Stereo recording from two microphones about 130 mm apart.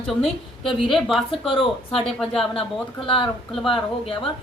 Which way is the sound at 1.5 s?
45° left (ahead or behind).